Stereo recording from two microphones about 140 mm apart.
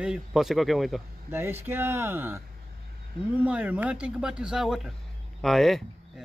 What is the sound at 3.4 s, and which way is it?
Speech, 10° right (ahead or behind).